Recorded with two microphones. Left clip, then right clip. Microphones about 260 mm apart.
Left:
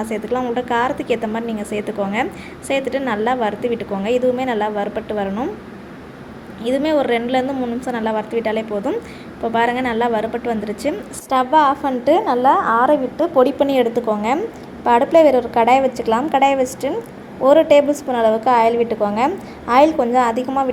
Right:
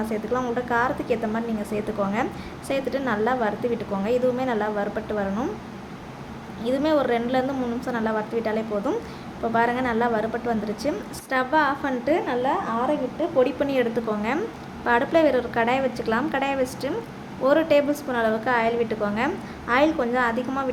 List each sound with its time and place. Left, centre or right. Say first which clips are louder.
0.1 s a woman's voice: left 6 dB; centre
6.7 s a woman's voice: left 5 dB; centre